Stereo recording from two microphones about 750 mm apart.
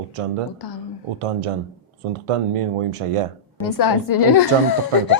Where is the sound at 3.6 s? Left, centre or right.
Left.